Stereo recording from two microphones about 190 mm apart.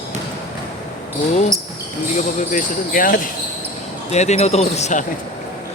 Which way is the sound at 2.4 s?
40° left (ahead or behind).